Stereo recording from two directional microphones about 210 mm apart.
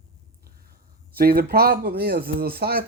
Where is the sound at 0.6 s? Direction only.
45° right (ahead or behind).